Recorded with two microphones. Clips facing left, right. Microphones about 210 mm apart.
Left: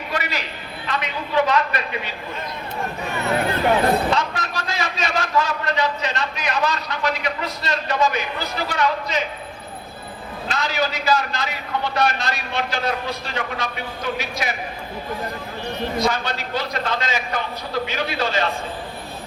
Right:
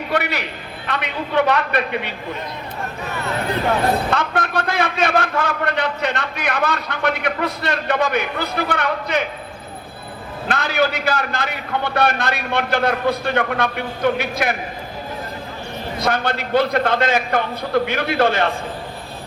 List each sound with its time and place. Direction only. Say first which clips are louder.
0.1 s a man's voice: right 5 dB; 60° right (ahead or behind)
4.1 s a man's voice: right 3 dB; 55° right (ahead or behind)
10.5 s a man's voice: right 4 dB; 55° right (ahead or behind)
16.0 s a man's voice: right 4 dB; 60° right (ahead or behind)